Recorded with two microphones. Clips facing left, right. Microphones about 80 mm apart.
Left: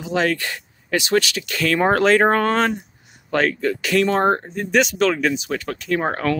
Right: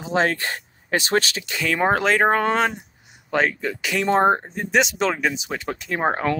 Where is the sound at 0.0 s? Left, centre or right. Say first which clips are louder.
Left 1 dB; right.